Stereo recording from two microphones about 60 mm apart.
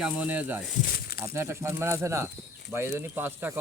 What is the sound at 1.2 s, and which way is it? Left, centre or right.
Speech, right.